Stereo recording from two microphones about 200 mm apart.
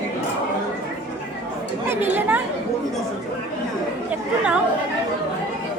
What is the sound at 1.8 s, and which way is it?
Speech, 10° right (ahead or behind).